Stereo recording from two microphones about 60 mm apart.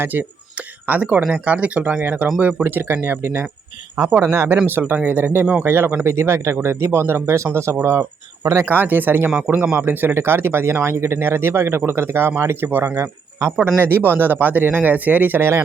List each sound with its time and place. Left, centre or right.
0.0 s a man's voice: right
8.6 s a man's voice: right
10.2 s a man's voice: right
15.4 s speech: right